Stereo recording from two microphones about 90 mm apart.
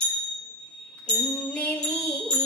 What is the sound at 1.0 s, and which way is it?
Music, 15° left (ahead or behind).